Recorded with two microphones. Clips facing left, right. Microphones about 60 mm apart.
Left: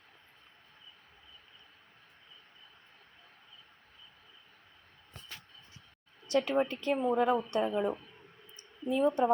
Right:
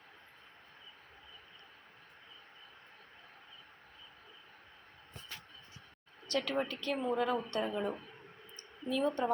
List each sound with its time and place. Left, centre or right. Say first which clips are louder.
6.2 s a woman's voice: left 6 dB; centre